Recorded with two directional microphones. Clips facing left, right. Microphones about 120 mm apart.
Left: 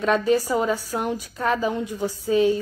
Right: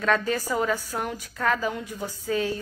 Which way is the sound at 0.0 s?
20° left (ahead or behind).